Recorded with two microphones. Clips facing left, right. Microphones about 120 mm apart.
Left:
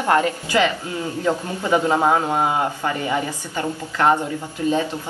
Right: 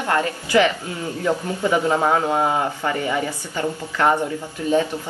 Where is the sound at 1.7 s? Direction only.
20° left (ahead or behind).